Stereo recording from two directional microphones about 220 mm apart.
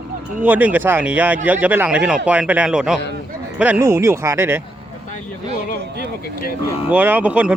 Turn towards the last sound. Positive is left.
turn(degrees=-5)  # may be behind; listen again after turning